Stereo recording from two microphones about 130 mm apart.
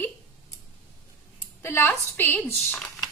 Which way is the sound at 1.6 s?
20° left (ahead or behind).